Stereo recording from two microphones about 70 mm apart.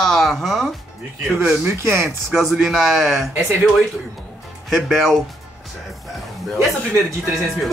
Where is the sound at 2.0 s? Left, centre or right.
Centre.